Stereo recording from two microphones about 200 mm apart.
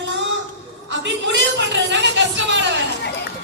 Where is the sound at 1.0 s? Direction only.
60° right (ahead or behind).